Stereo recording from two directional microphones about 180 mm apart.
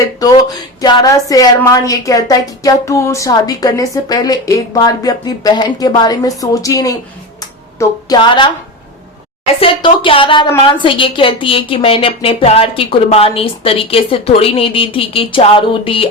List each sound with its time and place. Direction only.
0.0 s a sound: 20° left (ahead or behind)
0.8 s a woman's voice: 20° left (ahead or behind)
9.6 s a woman's voice: 30° left (ahead or behind)